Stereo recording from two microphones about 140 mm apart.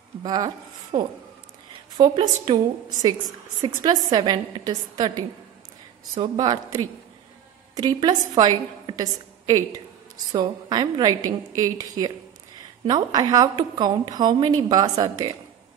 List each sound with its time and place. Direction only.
0.2 s a woman's voice: 30° right (ahead or behind)